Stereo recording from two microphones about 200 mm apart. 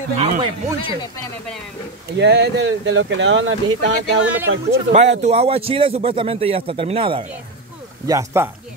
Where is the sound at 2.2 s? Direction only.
55° right (ahead or behind); by 3.9 s 75° right (ahead or behind).